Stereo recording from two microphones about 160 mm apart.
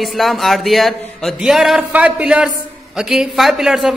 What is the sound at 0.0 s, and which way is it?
A man's voice, centre (ahead or behind).